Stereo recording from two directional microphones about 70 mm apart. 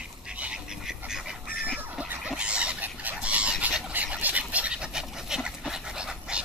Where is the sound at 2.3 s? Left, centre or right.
Centre.